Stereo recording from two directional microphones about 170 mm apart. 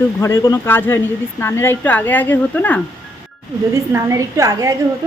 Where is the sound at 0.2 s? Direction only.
20° left (ahead or behind).